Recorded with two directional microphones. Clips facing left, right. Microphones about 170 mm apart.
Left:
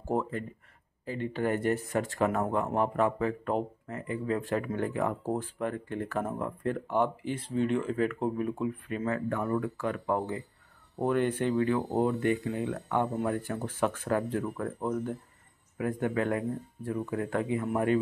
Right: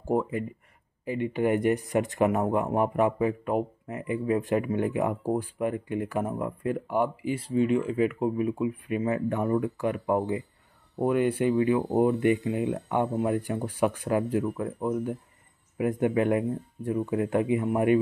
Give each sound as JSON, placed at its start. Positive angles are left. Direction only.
{"t": 0.0, "sound": "speech", "side_deg": -10}